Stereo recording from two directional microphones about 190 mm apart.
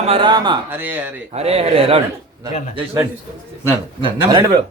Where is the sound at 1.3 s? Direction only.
35° right (ahead or behind).